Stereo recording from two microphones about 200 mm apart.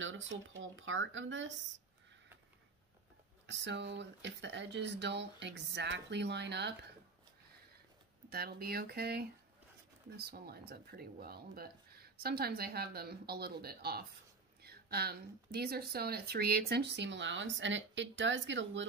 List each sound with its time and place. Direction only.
0.0 s speech: 70° right (ahead or behind)
3.4 s speech: 60° right (ahead or behind)
8.3 s speech: 50° right (ahead or behind); by 18.9 s 65° right (ahead or behind)